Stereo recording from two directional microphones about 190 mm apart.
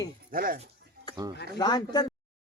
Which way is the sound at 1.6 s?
20° left (ahead or behind).